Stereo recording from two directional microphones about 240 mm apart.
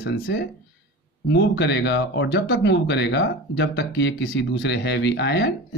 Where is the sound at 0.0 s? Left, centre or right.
Left.